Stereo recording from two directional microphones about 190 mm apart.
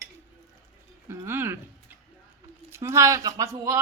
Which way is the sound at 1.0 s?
10° right (ahead or behind).